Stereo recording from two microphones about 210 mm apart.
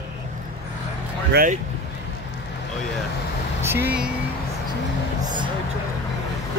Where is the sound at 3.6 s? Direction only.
10° right (ahead or behind).